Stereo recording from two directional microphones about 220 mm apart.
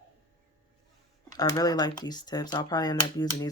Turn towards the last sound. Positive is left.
turn(degrees=15)  # may be behind; listen again after turning